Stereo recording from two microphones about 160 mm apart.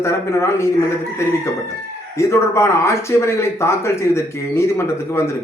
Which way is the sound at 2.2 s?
15° left (ahead or behind).